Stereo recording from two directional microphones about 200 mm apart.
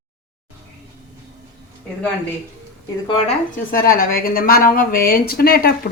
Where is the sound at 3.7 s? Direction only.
45° left (ahead or behind).